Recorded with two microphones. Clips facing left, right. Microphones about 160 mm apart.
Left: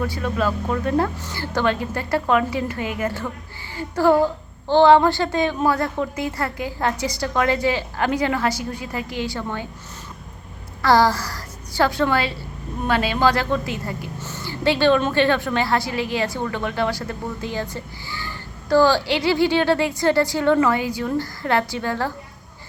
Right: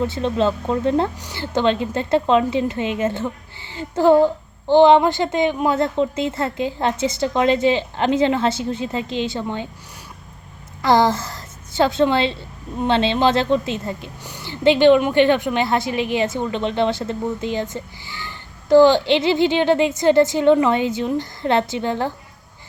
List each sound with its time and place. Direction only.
0.0 s a woman's voice: 25° right (ahead or behind)
10.8 s a woman's voice: 20° right (ahead or behind)